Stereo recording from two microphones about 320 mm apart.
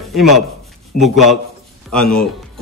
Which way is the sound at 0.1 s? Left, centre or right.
Centre.